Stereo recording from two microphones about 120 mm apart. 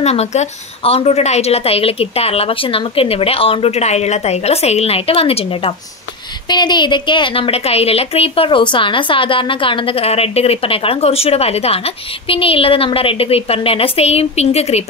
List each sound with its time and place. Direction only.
0.0 s a woman's voice: 65° left (ahead or behind)
6.4 s a woman's voice: 35° left (ahead or behind); by 14.9 s 60° left (ahead or behind)